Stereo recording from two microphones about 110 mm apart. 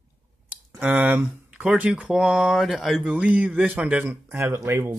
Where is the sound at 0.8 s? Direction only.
15° right (ahead or behind).